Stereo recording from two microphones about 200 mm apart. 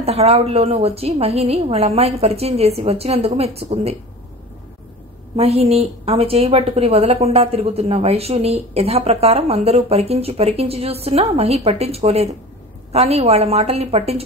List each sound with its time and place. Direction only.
0.0 s a woman's voice: 30° right (ahead or behind)
5.3 s a woman's voice: 30° right (ahead or behind)